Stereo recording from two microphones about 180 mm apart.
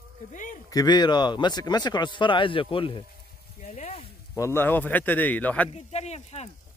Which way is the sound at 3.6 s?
40° left (ahead or behind).